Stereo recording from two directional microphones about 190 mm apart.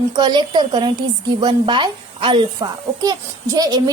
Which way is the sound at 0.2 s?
20° right (ahead or behind).